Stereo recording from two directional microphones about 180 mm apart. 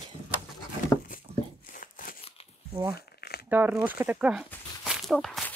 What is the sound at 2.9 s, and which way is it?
Crumpling, 60° left (ahead or behind).